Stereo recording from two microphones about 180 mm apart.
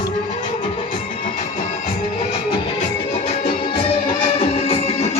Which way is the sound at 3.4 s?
30° left (ahead or behind).